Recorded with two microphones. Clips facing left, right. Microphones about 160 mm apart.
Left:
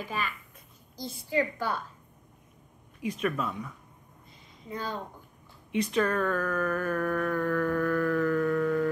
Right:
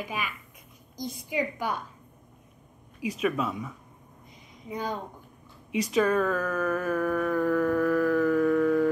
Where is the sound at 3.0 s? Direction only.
5° right (ahead or behind).